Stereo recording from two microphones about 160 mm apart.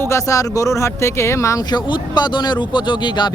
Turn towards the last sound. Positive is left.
turn(degrees=30)  # may be behind; listen again after turning